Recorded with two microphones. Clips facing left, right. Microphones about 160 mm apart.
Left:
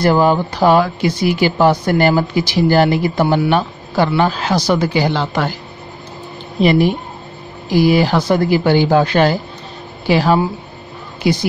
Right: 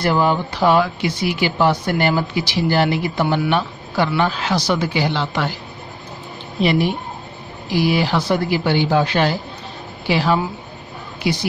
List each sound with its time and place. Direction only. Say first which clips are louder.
0.0 s a man's voice: left 5 dB; 40° left (ahead or behind)
6.6 s speech: left 5 dB; 45° left (ahead or behind)